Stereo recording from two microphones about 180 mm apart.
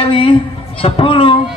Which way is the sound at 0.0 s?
30° left (ahead or behind).